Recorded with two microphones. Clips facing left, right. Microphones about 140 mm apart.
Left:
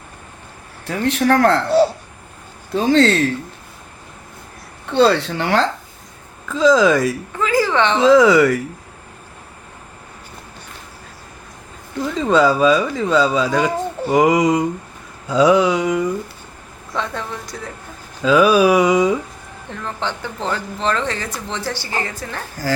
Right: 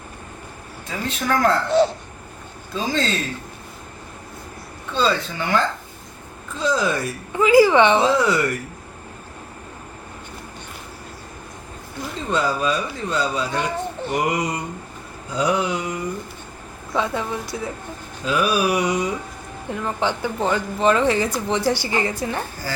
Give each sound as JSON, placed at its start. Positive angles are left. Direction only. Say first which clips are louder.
{"t": 0.9, "sound": "speech", "louder": "left 7 dB", "side_deg": 75}
{"t": 2.7, "sound": "speech", "louder": "left 9 dB", "side_deg": 70}
{"t": 4.9, "sound": "speech", "louder": "left 7 dB", "side_deg": 70}
{"t": 6.5, "sound": "speech", "louder": "left 9 dB", "side_deg": 90}
{"t": 7.3, "sound": "speech", "louder": "right 5 dB", "side_deg": -10}
{"t": 8.0, "sound": "speech", "louder": "left 8 dB", "side_deg": 90}
{"t": 12.1, "sound": "speech", "louder": "left 8 dB", "side_deg": 90}
{"t": 16.9, "sound": "speech", "louder": "right 2 dB", "side_deg": -5}
{"t": 18.2, "sound": "speech", "louder": "left 8 dB", "side_deg": 90}
{"t": 19.7, "sound": "speech", "louder": "right 2 dB", "side_deg": -10}
{"t": 22.6, "sound": "speech", "louder": "left 12 dB", "side_deg": 90}